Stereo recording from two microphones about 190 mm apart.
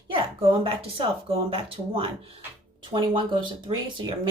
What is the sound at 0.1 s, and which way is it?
Speech, 30° right (ahead or behind).